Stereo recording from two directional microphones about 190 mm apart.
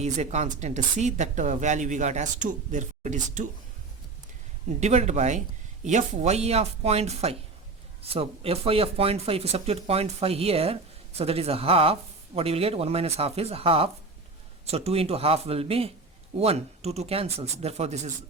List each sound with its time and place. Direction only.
0.0 s speech: 35° right (ahead or behind)
4.8 s speech: 35° right (ahead or behind)